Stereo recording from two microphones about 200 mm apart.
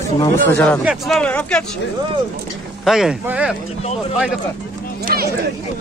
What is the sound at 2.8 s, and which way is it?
Speech, centre (ahead or behind).